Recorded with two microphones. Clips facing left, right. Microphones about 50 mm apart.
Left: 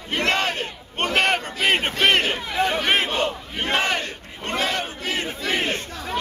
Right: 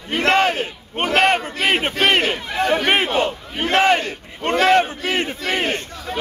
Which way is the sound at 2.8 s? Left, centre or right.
Centre.